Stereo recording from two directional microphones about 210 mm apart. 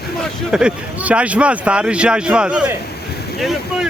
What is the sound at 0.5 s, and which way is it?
Speech, 5° right (ahead or behind).